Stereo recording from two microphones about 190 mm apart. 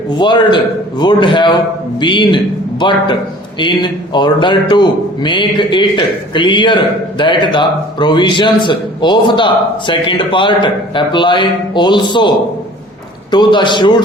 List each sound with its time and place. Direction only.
0.2 s speech: 25° left (ahead or behind)
13.3 s speech: 25° left (ahead or behind)